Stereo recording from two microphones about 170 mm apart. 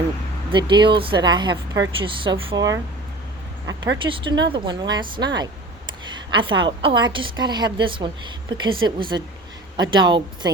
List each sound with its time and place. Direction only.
0.5 s a woman's voice: 30° right (ahead or behind)
4.1 s a woman's voice: 30° right (ahead or behind)